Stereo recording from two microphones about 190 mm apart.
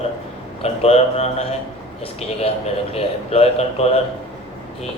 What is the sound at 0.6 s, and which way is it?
Speech, 35° left (ahead or behind).